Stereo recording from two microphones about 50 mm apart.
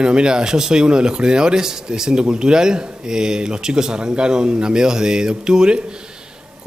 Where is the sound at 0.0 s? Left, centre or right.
Centre.